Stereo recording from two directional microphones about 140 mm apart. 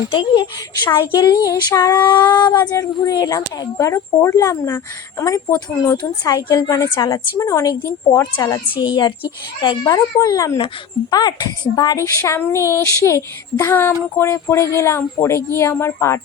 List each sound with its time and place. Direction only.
0.1 s a woman's voice: 35° left (ahead or behind)
6.0 s a woman's voice: 30° left (ahead or behind)